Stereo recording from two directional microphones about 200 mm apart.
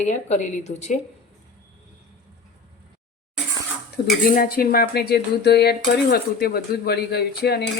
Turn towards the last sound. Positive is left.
turn(degrees=55)  # may be behind; listen again after turning